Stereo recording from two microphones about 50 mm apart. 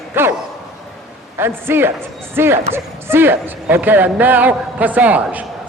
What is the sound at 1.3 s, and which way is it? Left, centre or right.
Speech, right.